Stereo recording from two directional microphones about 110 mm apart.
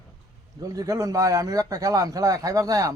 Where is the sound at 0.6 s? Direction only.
30° right (ahead or behind).